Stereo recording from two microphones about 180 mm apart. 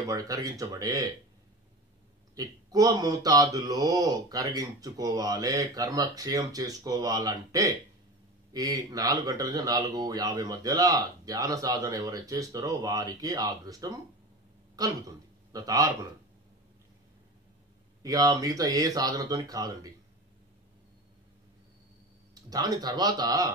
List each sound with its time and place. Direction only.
0.0 s speech: 20° right (ahead or behind)
2.3 s speech: 20° right (ahead or behind)
18.0 s speech: 20° right (ahead or behind)
22.3 s speech: 20° right (ahead or behind)